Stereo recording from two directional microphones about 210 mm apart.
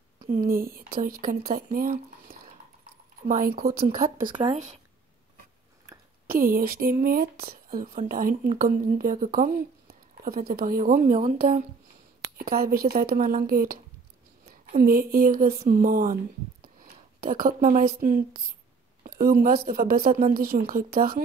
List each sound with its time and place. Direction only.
0.3 s a woman's voice: 45° right (ahead or behind)
6.4 s speech: 45° right (ahead or behind)
14.8 s speech: 45° right (ahead or behind)
17.2 s a woman's voice: 40° right (ahead or behind)